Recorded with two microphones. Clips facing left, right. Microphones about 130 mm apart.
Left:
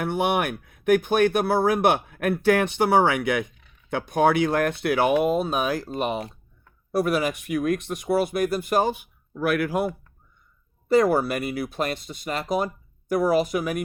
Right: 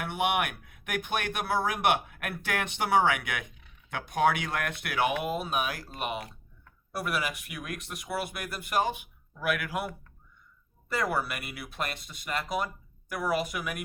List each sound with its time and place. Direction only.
0.0 s speech: 35° left (ahead or behind)